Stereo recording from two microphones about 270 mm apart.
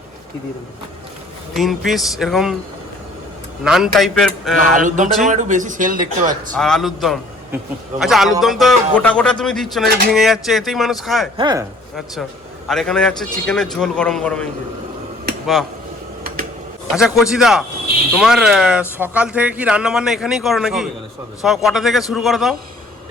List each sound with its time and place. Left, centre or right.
1.5 s speech: centre
3.6 s speech: centre
4.8 s speech: right
6.6 s speech: centre
11.3 s speech: centre
12.6 s speech: centre
16.9 s speech: centre